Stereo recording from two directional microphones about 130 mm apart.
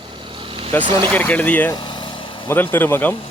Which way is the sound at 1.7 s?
35° left (ahead or behind).